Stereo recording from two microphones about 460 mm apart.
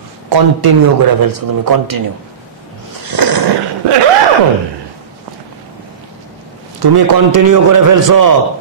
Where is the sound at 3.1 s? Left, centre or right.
Right.